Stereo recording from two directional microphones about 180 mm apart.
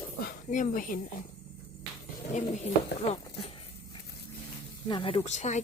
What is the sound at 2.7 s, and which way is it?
Speech, 35° left (ahead or behind).